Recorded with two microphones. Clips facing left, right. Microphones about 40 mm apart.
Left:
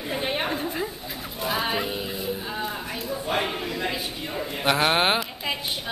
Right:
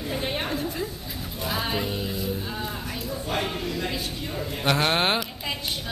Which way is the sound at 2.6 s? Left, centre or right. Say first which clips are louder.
Left 2 dB; centre.